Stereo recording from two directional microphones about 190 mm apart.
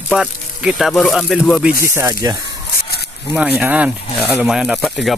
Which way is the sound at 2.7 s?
55° left (ahead or behind).